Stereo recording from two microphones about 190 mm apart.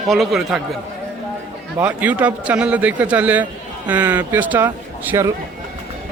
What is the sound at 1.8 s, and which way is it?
A man's voice, 10° right (ahead or behind).